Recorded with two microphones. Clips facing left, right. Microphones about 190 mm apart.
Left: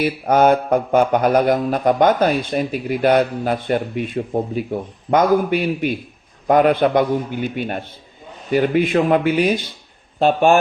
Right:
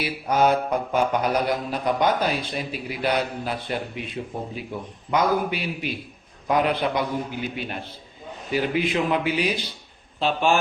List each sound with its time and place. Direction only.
0.0 s speech: 55° left (ahead or behind)